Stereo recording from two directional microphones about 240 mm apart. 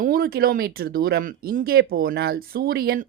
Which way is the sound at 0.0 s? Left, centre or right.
Right.